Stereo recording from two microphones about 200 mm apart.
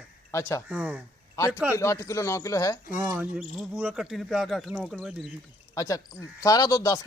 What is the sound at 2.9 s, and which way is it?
Speech, 15° right (ahead or behind).